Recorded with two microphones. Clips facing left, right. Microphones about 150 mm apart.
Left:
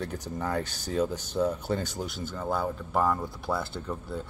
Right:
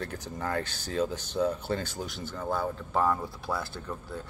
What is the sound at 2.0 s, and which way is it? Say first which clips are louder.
Speech: left 2 dB; centre (ahead or behind).